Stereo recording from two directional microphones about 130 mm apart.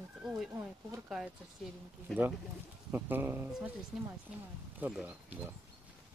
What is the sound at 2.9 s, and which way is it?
Speech, 15° right (ahead or behind).